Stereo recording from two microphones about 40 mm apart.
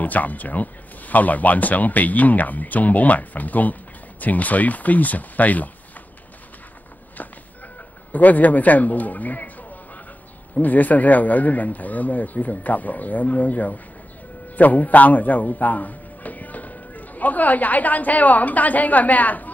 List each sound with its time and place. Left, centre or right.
0.0 s speech: left
8.1 s a man's voice: left